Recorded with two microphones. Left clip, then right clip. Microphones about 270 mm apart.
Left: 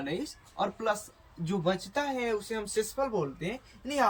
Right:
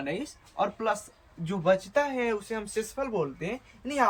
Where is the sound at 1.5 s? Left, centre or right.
Centre.